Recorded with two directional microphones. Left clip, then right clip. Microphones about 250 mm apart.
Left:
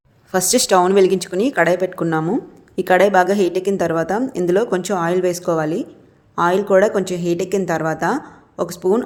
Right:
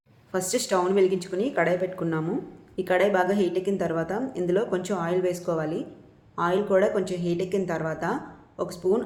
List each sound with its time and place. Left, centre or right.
0.3 s a woman's voice: left